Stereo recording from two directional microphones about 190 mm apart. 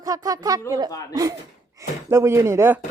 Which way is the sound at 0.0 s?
20° right (ahead or behind).